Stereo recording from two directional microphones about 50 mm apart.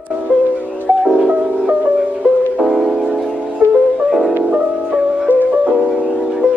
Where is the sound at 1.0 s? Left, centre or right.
Centre.